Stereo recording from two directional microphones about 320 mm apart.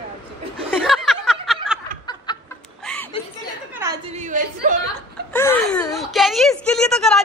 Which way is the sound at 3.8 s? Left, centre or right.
Centre.